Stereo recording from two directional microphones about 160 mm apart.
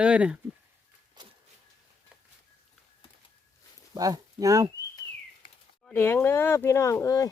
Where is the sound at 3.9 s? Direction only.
20° right (ahead or behind).